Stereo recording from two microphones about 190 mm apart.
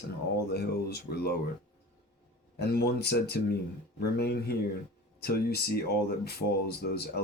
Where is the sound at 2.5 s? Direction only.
60° left (ahead or behind).